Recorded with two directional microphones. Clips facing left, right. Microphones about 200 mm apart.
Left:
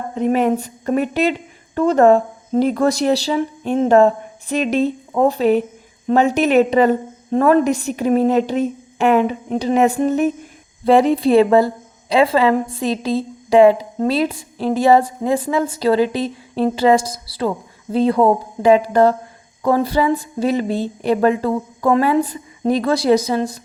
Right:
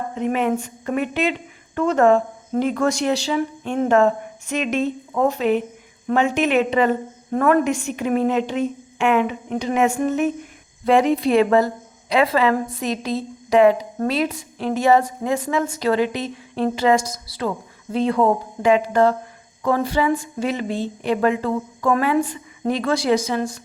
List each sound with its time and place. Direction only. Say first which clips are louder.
0.1 s a woman's voice: left 5 dB; 35° left (ahead or behind)